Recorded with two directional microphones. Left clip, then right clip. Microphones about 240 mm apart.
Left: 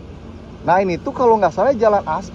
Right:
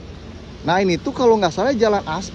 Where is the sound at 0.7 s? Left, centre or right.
Centre.